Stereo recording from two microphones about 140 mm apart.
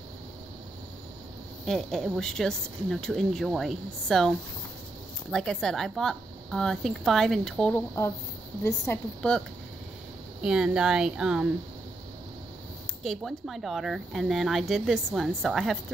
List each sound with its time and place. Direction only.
1.7 s speech: centre (ahead or behind)
5.3 s speech: 5° left (ahead or behind)
7.7 s speech: 20° left (ahead or behind)
10.4 s speech: 5° right (ahead or behind)
13.0 s speech: centre (ahead or behind)